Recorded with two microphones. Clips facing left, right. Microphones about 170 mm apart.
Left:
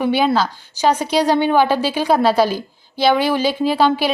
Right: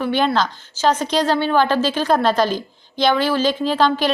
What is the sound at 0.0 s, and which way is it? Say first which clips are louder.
A woman's voice: left 2 dB; 10° left (ahead or behind).